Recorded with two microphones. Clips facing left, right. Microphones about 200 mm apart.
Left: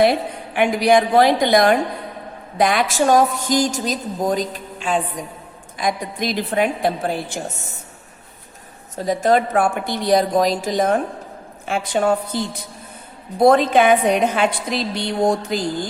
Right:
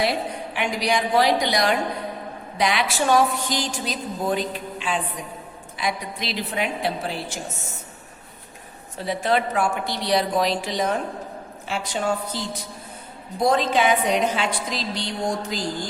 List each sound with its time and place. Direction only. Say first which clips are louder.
0.0 s a woman's voice: left 7 dB; 55° left (ahead or behind)
9.0 s a woman's voice: left 6 dB; 45° left (ahead or behind)
13.4 s a woman's voice: left 6 dB; 55° left (ahead or behind)